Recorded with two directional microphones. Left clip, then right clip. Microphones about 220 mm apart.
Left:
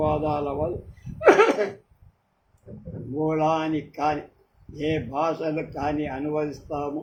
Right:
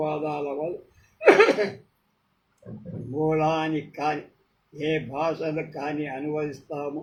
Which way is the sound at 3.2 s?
15° left (ahead or behind).